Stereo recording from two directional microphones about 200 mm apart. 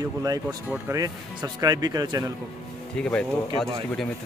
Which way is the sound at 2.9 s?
5° left (ahead or behind).